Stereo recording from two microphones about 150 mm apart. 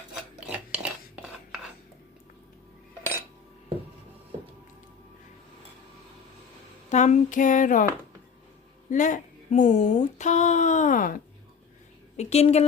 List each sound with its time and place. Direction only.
0.1 s cutlery: 5° right (ahead or behind)
6.9 s a sound: 50° left (ahead or behind)
8.9 s speech: 60° left (ahead or behind)
12.1 s speech: 45° left (ahead or behind)